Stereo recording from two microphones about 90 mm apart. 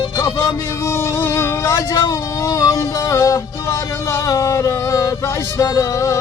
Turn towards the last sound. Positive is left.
turn(degrees=40)  # may be behind; listen again after turning